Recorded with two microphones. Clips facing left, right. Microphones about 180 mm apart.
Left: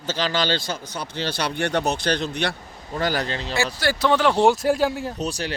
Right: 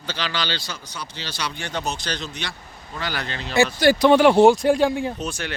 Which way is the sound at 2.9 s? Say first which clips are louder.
Left 5 dB; 40° left (ahead or behind).